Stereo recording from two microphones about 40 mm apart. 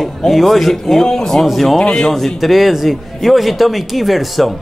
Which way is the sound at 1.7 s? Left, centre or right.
Centre.